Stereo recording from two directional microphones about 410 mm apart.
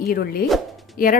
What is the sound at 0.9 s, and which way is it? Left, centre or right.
Speech, centre.